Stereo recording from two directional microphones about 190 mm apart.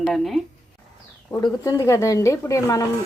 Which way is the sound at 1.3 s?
20° left (ahead or behind).